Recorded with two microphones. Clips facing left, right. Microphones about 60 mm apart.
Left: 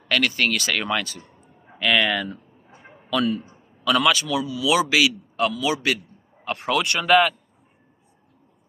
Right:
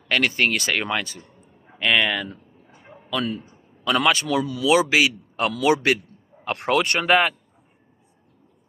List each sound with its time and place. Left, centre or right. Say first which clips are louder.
0.1 s speech: right 1 dB; right
3.8 s a man's voice: even; right
4.6 s a man's voice: right 1 dB; right
5.4 s a man's voice: right 3 dB; right
6.8 s a man's voice: left 2 dB; right